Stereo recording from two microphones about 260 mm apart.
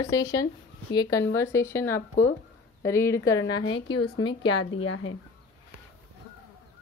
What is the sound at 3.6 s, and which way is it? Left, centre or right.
Speech, left.